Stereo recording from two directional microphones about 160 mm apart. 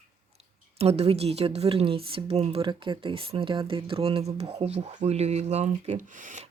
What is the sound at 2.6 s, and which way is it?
Speech, 30° right (ahead or behind).